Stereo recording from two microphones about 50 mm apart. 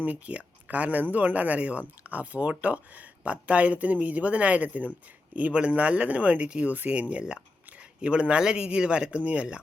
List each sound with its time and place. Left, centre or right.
0.0 s speech: right